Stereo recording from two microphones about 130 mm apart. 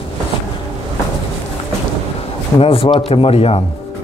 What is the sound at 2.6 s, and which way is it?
Speech, 45° left (ahead or behind).